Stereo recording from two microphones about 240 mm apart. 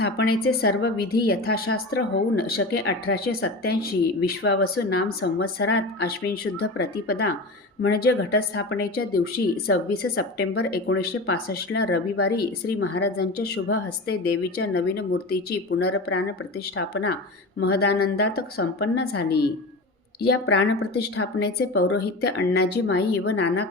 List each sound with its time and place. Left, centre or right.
0.0 s speech: left
1.7 s speech: left
20.6 s speech: left